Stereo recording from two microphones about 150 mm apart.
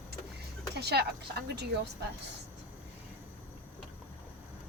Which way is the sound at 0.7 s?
90° right.